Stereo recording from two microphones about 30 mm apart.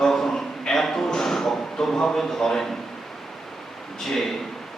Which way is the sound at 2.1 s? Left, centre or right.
Centre.